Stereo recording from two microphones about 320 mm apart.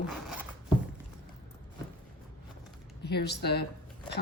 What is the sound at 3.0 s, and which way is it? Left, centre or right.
Speech, left.